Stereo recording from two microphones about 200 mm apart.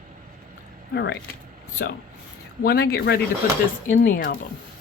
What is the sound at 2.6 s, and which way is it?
Speech, 55° left (ahead or behind).